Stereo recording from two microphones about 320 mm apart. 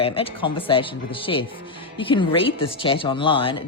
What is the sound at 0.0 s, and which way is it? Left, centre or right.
A woman's voice, centre.